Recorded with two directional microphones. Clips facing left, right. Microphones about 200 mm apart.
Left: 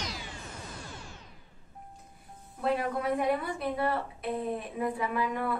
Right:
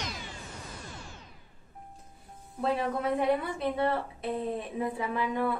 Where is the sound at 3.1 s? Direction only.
25° right (ahead or behind).